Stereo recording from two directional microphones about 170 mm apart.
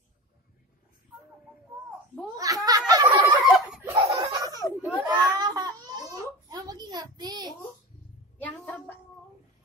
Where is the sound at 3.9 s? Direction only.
40° right (ahead or behind).